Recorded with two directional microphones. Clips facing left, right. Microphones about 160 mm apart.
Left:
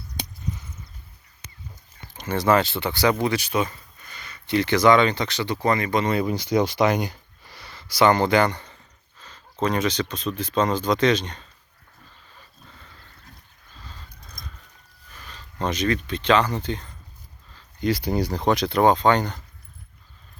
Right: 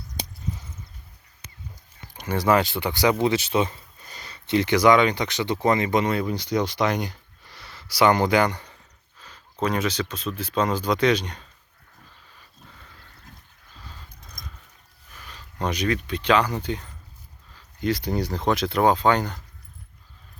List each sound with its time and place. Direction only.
0.2 s a sound: 35° right (ahead or behind)
2.1 s speech: 10° right (ahead or behind)
4.1 s a sound: 35° right (ahead or behind)
4.4 s speech: 20° right (ahead or behind)
6.2 s speech: 10° left (ahead or behind); by 11.4 s 10° right (ahead or behind)
15.1 s speech: 10° right (ahead or behind)